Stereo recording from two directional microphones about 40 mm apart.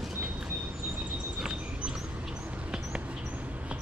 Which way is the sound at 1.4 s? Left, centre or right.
Right.